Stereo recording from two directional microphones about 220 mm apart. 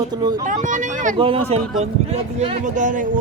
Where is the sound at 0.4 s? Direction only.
35° right (ahead or behind).